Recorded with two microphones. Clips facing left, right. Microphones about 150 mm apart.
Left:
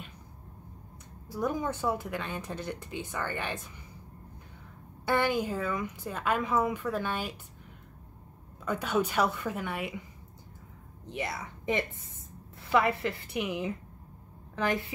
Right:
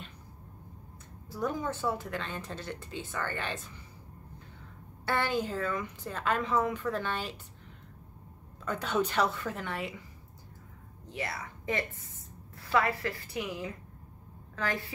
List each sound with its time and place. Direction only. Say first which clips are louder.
1.3 s speech: left 2 dB; 15° left (ahead or behind)
5.0 s speech: left 3 dB; 15° left (ahead or behind)
8.6 s speech: left 1 dB; 10° left (ahead or behind)
11.1 s a woman's voice: left 2 dB; 20° left (ahead or behind)